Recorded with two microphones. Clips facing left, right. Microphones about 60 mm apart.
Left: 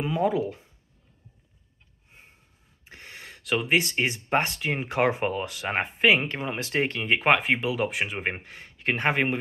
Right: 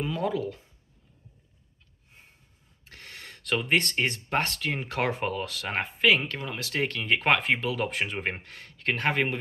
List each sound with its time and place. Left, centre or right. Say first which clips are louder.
0.0 s speech: left 4 dB; centre
2.8 s speech: left 1 dB; centre